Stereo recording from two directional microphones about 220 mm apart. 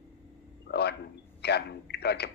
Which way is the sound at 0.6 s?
50° left (ahead or behind).